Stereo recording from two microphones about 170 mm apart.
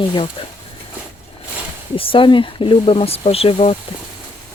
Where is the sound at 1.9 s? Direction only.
30° left (ahead or behind).